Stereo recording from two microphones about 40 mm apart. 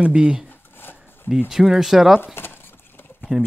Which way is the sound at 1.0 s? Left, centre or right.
Left.